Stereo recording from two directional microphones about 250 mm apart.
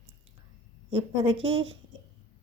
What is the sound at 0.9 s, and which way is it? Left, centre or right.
Speech, right.